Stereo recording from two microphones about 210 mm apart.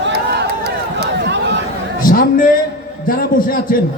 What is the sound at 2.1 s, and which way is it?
A man's voice, 40° left (ahead or behind).